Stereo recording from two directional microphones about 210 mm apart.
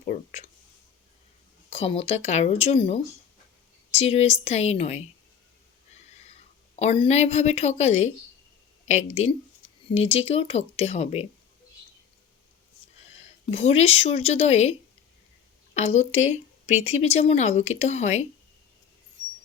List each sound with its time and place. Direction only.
0.0 s speech: 35° left (ahead or behind)
1.7 s speech: 30° left (ahead or behind)
7.0 s speech: 30° left (ahead or behind)
13.5 s speech: 30° left (ahead or behind)